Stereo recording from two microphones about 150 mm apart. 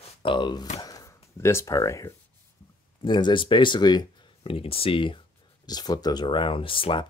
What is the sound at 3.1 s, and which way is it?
Speech, 30° left (ahead or behind).